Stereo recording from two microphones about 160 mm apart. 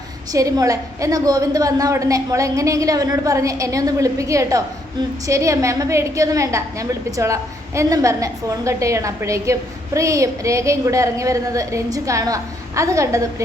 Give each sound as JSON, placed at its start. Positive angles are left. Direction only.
{"t": 0.3, "sound": "a woman's voice", "side_deg": -20}